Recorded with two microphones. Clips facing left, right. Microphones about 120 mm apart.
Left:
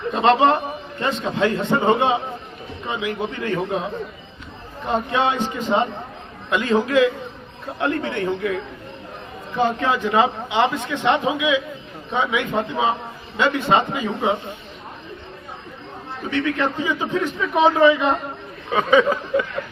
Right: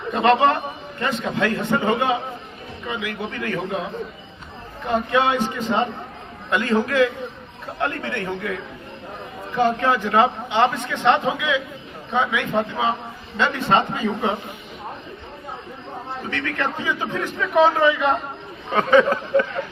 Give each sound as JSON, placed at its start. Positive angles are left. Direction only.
{"t": 0.2, "sound": "a man's voice", "side_deg": 20}
{"t": 5.1, "sound": "a man's voice", "side_deg": 20}
{"t": 9.6, "sound": "a man's voice", "side_deg": 20}
{"t": 16.3, "sound": "a man's voice", "side_deg": 15}